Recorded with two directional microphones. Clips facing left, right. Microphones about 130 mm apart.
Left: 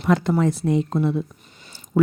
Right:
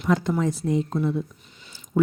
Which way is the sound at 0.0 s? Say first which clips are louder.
Left 3 dB; 70° left (ahead or behind).